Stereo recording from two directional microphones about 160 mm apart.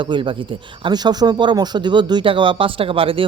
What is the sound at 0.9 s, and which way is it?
Speech, 25° right (ahead or behind).